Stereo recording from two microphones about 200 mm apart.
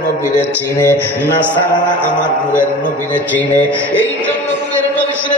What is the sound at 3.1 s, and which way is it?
Music, 10° left (ahead or behind).